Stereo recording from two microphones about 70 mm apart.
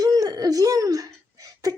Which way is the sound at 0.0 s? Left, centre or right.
Right.